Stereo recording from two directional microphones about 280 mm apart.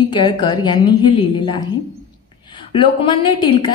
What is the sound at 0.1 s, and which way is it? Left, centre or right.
A woman's voice, centre.